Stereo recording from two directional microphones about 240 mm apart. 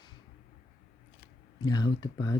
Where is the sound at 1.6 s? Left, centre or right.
Centre.